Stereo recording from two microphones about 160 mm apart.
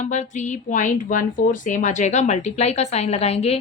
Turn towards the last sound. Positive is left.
turn(degrees=40)  # may be behind; listen again after turning